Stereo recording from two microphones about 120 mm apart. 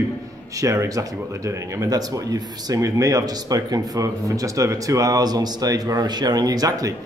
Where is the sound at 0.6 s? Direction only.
30° right (ahead or behind).